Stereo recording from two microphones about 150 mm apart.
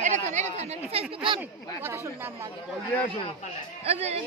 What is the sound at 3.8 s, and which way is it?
Speech, 45° right (ahead or behind).